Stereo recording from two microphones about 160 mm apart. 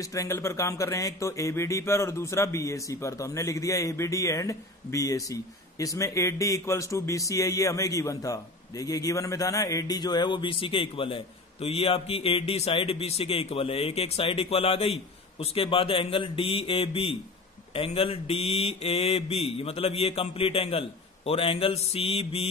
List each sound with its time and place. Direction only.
0.0 s speech: 20° left (ahead or behind); by 17.2 s 35° left (ahead or behind)
17.7 s mantra: 35° left (ahead or behind)